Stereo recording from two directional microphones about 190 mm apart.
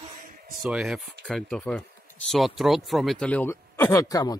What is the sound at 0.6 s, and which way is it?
Speech, 5° right (ahead or behind).